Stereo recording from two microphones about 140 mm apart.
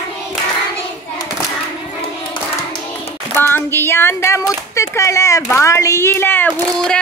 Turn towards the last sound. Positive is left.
turn(degrees=10)  # may be behind; listen again after turning